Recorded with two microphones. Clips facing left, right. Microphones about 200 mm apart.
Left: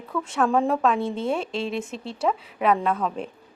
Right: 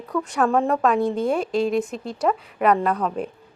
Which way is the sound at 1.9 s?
30° left (ahead or behind).